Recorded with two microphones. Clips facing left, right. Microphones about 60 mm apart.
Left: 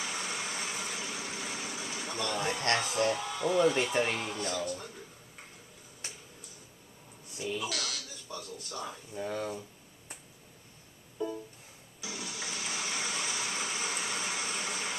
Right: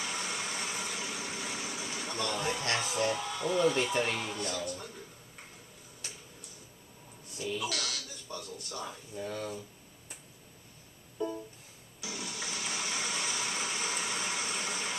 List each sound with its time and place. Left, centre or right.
0.0 s vehicle: centre
3.1 s speech: centre
7.5 s speech: centre
9.1 s a sound: left
11.2 s music: centre
12.0 s a sound: centre